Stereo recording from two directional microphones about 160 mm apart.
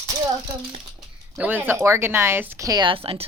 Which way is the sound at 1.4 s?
10° right (ahead or behind).